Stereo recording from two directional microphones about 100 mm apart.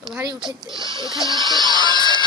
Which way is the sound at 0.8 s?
45° right (ahead or behind).